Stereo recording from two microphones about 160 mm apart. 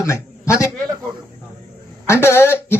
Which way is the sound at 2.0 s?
15° left (ahead or behind).